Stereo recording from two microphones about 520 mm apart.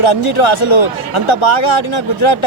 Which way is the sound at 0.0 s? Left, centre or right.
Left.